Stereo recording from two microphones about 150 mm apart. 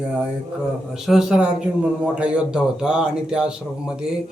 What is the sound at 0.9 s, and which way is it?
A man's voice, 5° right (ahead or behind).